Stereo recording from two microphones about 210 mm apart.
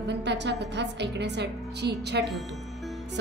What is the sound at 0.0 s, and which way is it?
A woman's voice, 55° right (ahead or behind).